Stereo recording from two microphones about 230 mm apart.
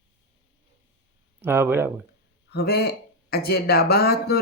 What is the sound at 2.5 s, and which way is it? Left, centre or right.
Speech, left.